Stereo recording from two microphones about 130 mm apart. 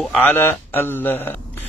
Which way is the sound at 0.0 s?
10° left (ahead or behind).